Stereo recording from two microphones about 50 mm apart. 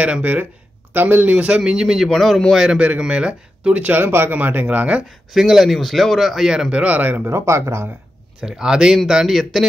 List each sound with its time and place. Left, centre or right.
0.0 s speech: right
1.6 s speech: centre
3.1 s speech: right
3.8 s speech: right
4.6 s speech: right
5.3 s speech: centre
5.7 s speech: centre
6.7 s speech: right
7.2 s speech: right
8.4 s speech: centre